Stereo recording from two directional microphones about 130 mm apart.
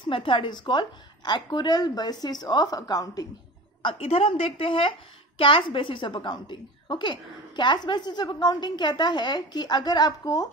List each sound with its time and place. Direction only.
0.0 s a woman's voice: 40° left (ahead or behind)
3.8 s a woman's voice: 45° left (ahead or behind); by 10.5 s 30° left (ahead or behind)